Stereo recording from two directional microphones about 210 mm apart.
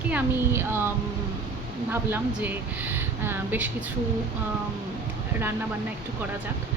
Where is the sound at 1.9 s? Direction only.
10° right (ahead or behind).